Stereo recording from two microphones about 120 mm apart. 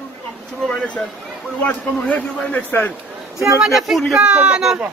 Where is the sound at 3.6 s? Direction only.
Centre (ahead or behind).